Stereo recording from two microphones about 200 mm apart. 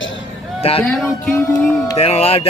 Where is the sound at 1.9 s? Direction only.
30° left (ahead or behind).